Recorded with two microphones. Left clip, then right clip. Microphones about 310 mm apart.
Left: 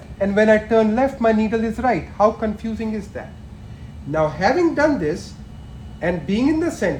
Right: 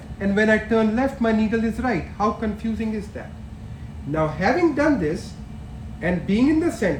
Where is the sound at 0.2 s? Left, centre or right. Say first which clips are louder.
Left 4 dB; centre.